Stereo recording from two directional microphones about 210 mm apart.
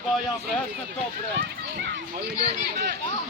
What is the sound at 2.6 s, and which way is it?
Speech, 50° right (ahead or behind).